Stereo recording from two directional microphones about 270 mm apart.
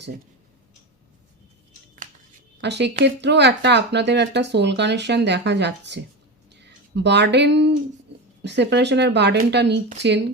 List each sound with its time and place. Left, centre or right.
2.6 s speech: right